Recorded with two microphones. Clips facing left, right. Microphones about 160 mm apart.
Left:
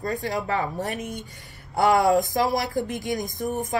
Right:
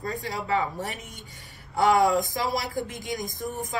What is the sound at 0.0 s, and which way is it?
Speech, 45° left (ahead or behind).